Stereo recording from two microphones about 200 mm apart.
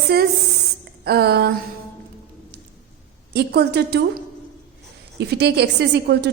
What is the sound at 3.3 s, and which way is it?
Speech, 55° right (ahead or behind).